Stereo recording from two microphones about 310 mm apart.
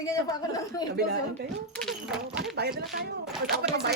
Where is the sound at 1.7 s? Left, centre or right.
Centre.